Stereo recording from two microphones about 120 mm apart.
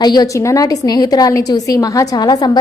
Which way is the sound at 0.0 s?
35° left (ahead or behind).